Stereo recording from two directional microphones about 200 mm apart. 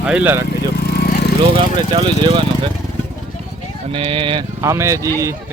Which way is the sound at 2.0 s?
25° right (ahead or behind).